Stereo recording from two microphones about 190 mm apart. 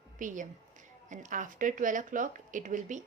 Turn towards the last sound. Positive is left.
turn(degrees=-40)  # may be behind; listen again after turning